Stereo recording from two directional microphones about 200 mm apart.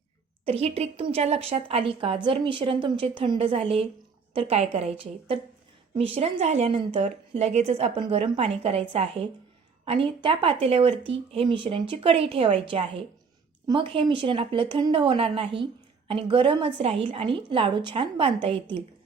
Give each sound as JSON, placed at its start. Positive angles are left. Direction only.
{"t": 0.4, "sound": "a woman's voice", "side_deg": -30}